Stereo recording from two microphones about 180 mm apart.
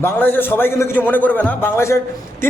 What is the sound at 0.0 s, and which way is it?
A man's voice, 10° left (ahead or behind).